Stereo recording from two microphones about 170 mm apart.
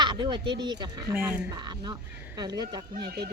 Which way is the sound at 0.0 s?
25° right (ahead or behind).